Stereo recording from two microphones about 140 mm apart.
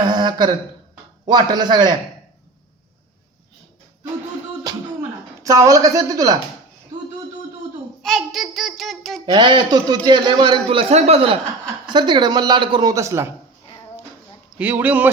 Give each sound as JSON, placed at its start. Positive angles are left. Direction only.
{"t": 0.0, "sound": "a sound", "side_deg": -30}
{"t": 1.3, "sound": "a man's voice", "side_deg": -30}
{"t": 5.4, "sound": "a woman's voice", "side_deg": -25}
{"t": 8.0, "sound": "a child's voice", "side_deg": 0}
{"t": 9.2, "sound": "a man's voice", "side_deg": -35}
{"t": 11.9, "sound": "a man's voice", "side_deg": -35}
{"t": 12.9, "sound": "a woman's voice", "side_deg": -20}
{"t": 14.6, "sound": "speech", "side_deg": -10}